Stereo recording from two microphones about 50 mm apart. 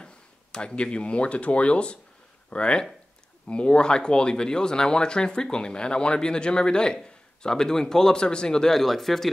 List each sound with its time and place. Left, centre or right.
0.0 s speech: centre